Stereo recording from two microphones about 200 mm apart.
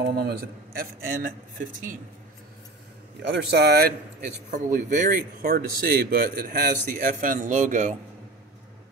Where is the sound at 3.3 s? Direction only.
55° right (ahead or behind).